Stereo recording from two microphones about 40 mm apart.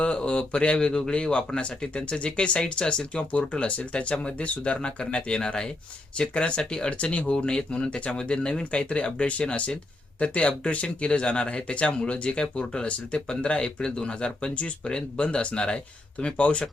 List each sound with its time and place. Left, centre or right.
0.0 s speech: left
7.3 s speech: left